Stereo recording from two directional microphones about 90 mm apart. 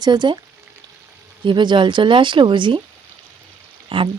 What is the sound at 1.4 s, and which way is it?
A woman's voice, 65° right (ahead or behind).